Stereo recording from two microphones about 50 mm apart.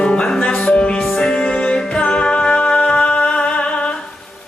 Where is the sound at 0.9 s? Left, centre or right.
Centre; by 3.9 s left.